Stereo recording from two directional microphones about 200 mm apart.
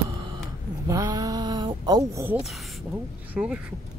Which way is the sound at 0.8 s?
15° right (ahead or behind).